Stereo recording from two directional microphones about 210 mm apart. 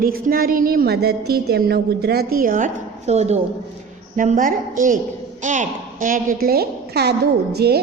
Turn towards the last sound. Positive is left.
turn(degrees=-50)  # may be behind; listen again after turning